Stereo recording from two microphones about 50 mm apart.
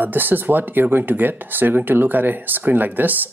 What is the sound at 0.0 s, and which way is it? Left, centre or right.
Speech, right.